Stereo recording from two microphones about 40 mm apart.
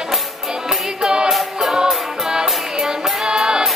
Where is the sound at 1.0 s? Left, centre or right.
Right.